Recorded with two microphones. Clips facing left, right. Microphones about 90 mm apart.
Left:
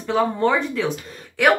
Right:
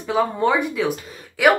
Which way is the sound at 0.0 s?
10° right (ahead or behind).